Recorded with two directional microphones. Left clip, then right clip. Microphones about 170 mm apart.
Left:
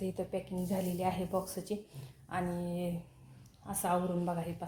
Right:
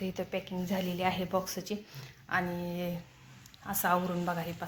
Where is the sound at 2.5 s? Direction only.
25° right (ahead or behind).